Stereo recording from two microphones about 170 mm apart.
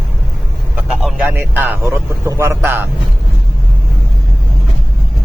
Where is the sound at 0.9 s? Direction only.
Centre (ahead or behind).